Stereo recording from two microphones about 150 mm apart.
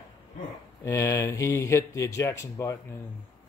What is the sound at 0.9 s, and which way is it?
Speech, 20° left (ahead or behind).